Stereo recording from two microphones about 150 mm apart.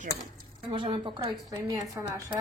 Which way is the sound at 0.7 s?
35° right (ahead or behind).